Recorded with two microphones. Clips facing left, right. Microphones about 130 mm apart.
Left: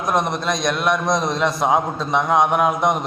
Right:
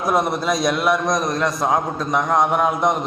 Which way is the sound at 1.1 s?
25° left (ahead or behind).